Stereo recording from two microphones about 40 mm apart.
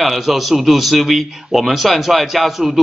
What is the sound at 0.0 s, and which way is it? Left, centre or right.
A man's voice, centre.